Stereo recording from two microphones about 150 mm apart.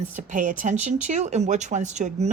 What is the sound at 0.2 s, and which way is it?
A woman's voice, 60° right (ahead or behind).